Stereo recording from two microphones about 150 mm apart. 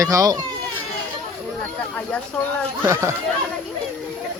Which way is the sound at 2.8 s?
15° right (ahead or behind).